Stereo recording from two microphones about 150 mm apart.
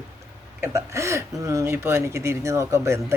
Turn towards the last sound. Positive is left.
turn(degrees=-20)  # may be behind; listen again after turning